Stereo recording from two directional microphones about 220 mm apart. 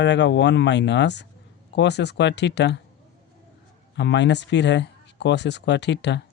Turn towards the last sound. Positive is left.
turn(degrees=50)  # may be behind; listen again after turning